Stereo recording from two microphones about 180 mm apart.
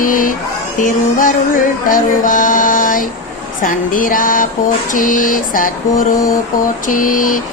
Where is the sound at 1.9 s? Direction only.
50° left (ahead or behind).